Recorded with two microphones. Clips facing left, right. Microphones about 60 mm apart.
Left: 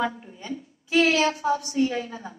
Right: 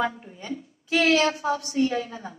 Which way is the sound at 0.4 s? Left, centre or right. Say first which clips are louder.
Right 2 dB; right.